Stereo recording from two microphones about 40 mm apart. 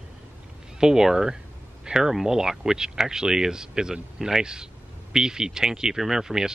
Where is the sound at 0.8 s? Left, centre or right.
Centre.